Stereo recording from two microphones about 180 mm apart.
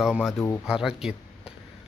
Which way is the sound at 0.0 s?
5° right (ahead or behind).